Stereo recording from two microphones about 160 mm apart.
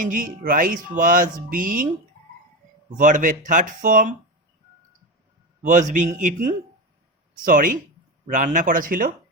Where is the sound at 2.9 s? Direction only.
55° right (ahead or behind).